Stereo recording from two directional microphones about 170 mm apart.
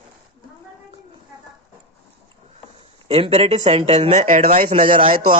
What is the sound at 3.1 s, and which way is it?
Speech, 35° right (ahead or behind).